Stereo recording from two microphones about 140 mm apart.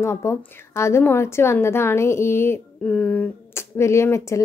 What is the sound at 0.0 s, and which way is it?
A woman's voice, 20° left (ahead or behind).